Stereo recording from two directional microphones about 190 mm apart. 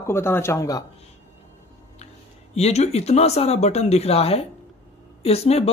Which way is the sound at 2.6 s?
35° left (ahead or behind).